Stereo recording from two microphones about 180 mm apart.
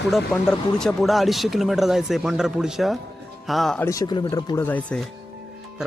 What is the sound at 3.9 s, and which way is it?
Speech, 20° left (ahead or behind).